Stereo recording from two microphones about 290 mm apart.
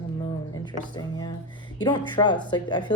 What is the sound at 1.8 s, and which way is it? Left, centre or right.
Speech, centre.